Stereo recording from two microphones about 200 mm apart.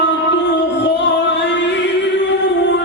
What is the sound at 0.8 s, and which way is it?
Music, 60° left (ahead or behind).